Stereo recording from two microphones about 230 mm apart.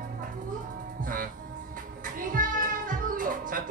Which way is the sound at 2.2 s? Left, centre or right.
Right.